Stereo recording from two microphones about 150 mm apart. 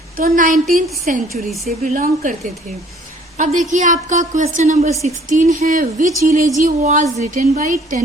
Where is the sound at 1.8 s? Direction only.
65° right (ahead or behind).